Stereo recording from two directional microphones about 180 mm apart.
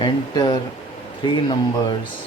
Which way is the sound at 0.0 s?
25° left (ahead or behind).